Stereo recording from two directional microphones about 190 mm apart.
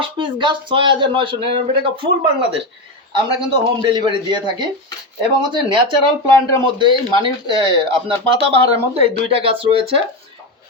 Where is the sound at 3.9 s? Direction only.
25° right (ahead or behind).